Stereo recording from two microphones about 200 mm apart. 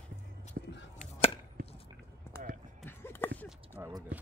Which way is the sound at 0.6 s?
50° right (ahead or behind).